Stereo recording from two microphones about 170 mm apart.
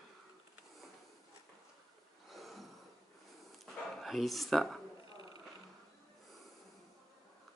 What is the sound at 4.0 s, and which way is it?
Speech, centre (ahead or behind).